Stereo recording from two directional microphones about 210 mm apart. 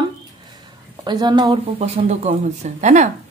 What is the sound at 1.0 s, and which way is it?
Speech, 20° right (ahead or behind).